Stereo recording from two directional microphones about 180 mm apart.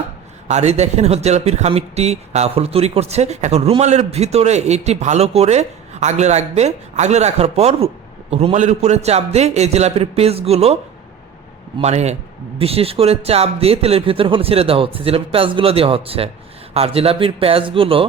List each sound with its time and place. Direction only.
0.4 s speech: 40° right (ahead or behind)
11.8 s speech: 35° right (ahead or behind)